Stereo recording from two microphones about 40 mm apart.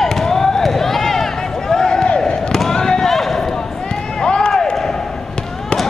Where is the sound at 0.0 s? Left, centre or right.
Centre.